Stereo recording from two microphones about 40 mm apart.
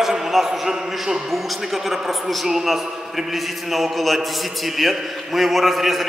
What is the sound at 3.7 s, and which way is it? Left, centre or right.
A man's voice, centre.